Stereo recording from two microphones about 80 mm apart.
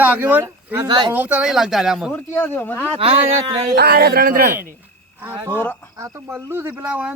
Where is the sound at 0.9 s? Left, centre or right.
Right.